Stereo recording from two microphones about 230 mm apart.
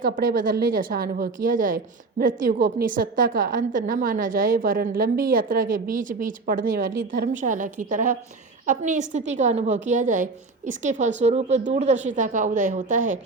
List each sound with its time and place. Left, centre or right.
0.0 s a woman's voice: right